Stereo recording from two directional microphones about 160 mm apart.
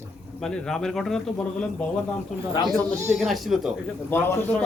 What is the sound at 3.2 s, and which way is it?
Speech, centre (ahead or behind).